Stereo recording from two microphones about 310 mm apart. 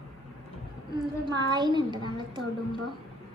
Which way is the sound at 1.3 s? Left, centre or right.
Centre.